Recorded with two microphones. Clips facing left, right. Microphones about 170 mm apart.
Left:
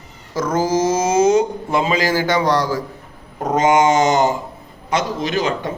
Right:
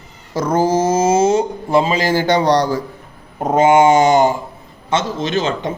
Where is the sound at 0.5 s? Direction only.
60° right (ahead or behind).